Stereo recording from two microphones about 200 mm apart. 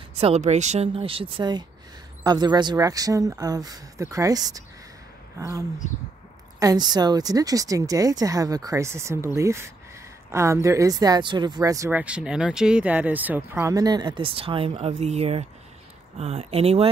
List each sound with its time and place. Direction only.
0.2 s speech: 35° right (ahead or behind)
6.6 s a woman's voice: 20° right (ahead or behind)